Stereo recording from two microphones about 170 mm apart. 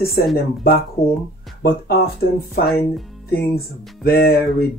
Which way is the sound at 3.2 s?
65° left (ahead or behind).